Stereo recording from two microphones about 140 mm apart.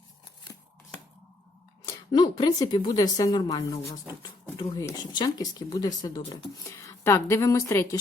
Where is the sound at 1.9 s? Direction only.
30° left (ahead or behind).